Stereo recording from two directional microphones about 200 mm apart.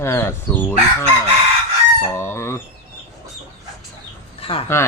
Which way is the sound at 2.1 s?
10° left (ahead or behind).